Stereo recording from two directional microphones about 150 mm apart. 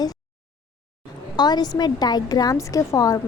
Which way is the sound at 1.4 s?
25° left (ahead or behind).